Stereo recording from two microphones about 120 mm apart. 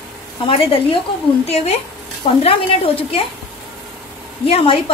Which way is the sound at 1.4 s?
60° left (ahead or behind).